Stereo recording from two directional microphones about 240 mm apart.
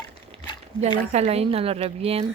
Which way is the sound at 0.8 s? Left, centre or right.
Right.